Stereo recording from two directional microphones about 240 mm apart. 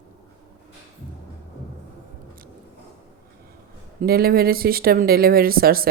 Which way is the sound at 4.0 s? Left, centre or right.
Right.